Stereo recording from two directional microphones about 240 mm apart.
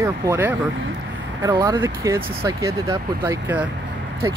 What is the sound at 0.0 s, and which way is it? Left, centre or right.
Speech, centre.